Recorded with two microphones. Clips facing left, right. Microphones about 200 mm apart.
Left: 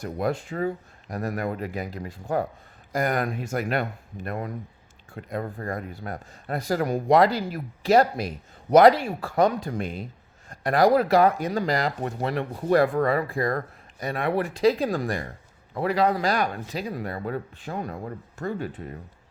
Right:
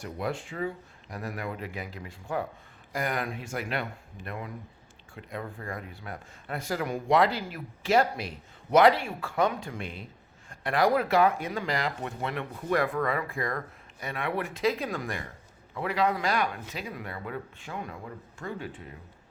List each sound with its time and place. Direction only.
0.0 s speech: 40° left (ahead or behind)